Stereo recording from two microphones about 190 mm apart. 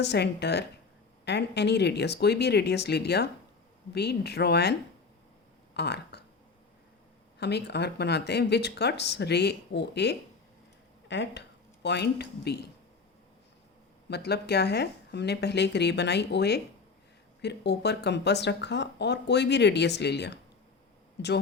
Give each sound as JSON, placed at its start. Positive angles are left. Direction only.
{"t": 0.0, "sound": "speech", "side_deg": 60}
{"t": 5.7, "sound": "speech", "side_deg": 60}
{"t": 7.3, "sound": "a woman's voice", "side_deg": 60}
{"t": 14.1, "sound": "speech", "side_deg": 60}